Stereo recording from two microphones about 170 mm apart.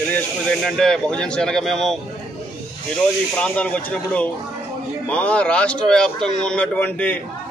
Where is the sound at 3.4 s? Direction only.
5° left (ahead or behind).